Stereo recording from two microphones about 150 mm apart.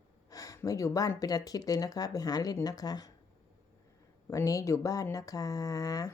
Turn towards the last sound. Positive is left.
turn(degrees=25)  # may be behind; listen again after turning